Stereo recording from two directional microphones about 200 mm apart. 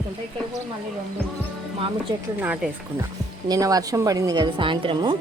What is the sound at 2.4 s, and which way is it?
A woman's voice, 10° right (ahead or behind).